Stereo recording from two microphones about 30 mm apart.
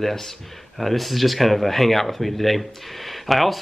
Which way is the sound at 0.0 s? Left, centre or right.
Centre.